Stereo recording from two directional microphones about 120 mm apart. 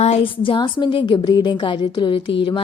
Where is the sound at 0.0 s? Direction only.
55° left (ahead or behind).